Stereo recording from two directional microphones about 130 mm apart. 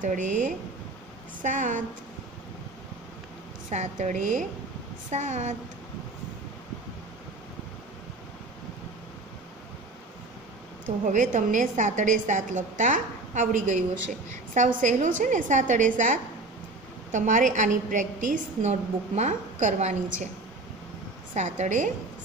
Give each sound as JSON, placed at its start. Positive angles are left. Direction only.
{"t": 0.0, "sound": "speech", "side_deg": -80}
{"t": 3.7, "sound": "a woman's voice", "side_deg": -65}
{"t": 10.9, "sound": "a woman's voice", "side_deg": -65}
{"t": 21.3, "sound": "a woman's voice", "side_deg": -70}